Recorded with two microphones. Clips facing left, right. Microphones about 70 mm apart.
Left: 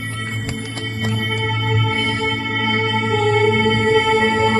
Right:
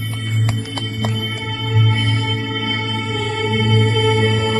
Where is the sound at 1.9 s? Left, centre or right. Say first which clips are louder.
Left 2 dB; left.